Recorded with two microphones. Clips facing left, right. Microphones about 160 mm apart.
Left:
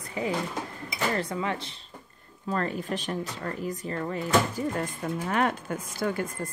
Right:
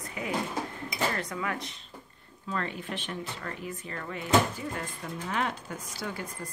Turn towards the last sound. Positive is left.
turn(degrees=50)  # may be behind; listen again after turning